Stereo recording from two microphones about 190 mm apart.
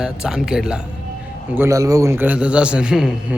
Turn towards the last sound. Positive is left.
turn(degrees=-5)  # may be behind; listen again after turning